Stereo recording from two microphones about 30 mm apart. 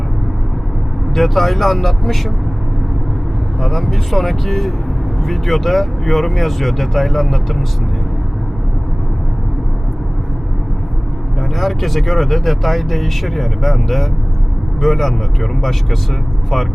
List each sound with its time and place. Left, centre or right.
1.1 s speech: centre
3.6 s speech: centre
11.5 s speech: centre